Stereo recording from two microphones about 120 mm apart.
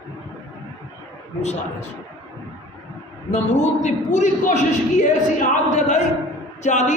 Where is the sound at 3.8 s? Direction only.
75° left (ahead or behind).